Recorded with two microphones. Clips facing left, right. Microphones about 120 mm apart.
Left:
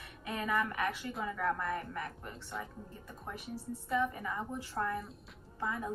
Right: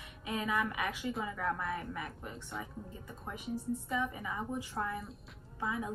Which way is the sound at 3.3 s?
15° right (ahead or behind).